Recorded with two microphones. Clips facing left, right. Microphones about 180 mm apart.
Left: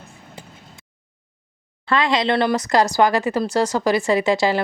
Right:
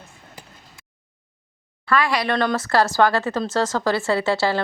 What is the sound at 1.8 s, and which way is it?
A woman's voice, 20° left (ahead or behind).